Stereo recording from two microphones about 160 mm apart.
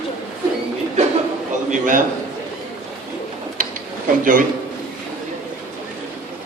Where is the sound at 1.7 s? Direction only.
55° right (ahead or behind).